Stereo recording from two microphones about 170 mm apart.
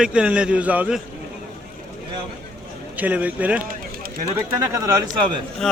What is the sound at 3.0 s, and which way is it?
Speech, 10° right (ahead or behind).